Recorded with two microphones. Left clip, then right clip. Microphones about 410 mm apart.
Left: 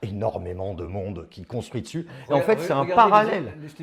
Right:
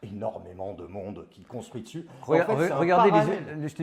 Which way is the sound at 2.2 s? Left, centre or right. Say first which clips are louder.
Left 2 dB; right.